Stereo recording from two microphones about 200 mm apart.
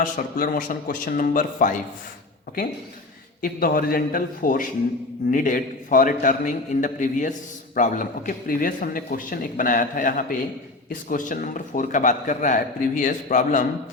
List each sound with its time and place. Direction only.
0.0 s a man's voice: 40° left (ahead or behind)
3.4 s a man's voice: 45° left (ahead or behind)